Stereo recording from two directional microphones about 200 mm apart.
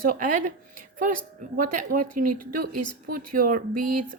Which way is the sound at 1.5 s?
40° right (ahead or behind).